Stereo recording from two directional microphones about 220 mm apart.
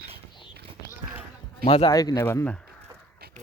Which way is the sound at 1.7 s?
25° left (ahead or behind).